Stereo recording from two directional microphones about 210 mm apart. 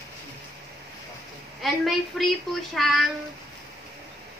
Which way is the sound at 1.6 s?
Centre (ahead or behind).